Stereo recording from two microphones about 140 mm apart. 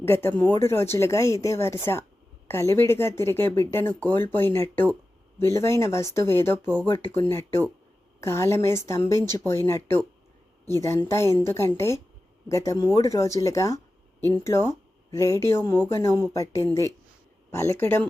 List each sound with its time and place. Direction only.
0.1 s speech: 15° left (ahead or behind)